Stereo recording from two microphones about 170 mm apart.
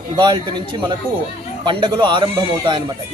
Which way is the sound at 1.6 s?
25° right (ahead or behind).